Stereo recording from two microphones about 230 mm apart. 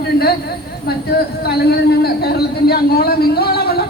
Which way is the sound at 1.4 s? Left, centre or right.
Left.